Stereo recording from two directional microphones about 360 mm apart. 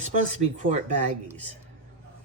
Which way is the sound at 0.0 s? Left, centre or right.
Centre.